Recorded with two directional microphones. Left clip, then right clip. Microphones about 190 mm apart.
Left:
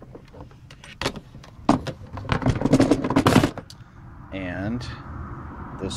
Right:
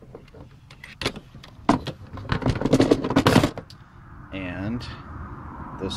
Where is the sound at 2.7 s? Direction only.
10° right (ahead or behind).